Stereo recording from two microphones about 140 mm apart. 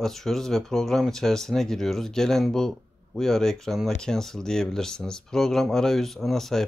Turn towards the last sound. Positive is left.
turn(degrees=0)  # may be behind; listen again after turning